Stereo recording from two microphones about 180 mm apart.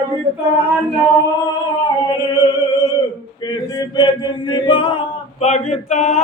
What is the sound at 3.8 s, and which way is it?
Chant, 25° left (ahead or behind).